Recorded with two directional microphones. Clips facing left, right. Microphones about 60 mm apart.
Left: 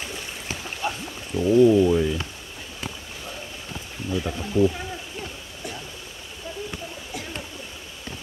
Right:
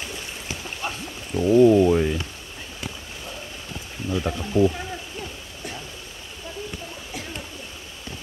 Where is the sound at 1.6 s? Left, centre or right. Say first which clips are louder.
Right 1 dB; right.